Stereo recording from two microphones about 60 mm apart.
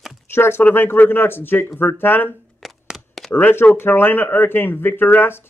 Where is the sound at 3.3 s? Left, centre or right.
Left.